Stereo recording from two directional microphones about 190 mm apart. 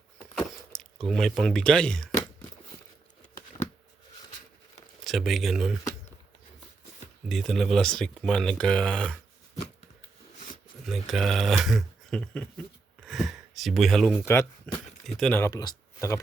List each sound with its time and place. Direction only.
0.3 s a sound: centre (ahead or behind)
1.0 s speech: centre (ahead or behind)
5.0 s speech: centre (ahead or behind)
7.3 s speech: centre (ahead or behind)
10.8 s speech: centre (ahead or behind)
13.1 s a sound: centre (ahead or behind)
14.2 s speech: 10° left (ahead or behind)
14.7 s a sound: 5° left (ahead or behind)
15.0 s speech: 5° left (ahead or behind)
15.4 s speech: 15° left (ahead or behind)